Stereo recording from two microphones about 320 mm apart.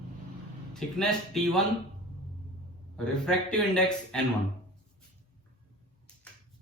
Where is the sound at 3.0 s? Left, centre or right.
Centre.